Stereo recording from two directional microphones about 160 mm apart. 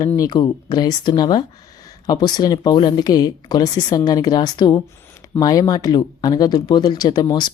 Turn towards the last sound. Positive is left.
turn(degrees=30)  # may be behind; listen again after turning